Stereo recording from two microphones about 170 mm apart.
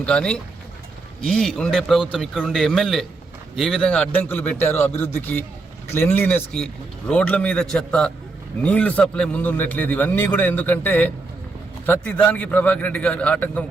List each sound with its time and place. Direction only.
0.0 s a man's voice: 5° left (ahead or behind)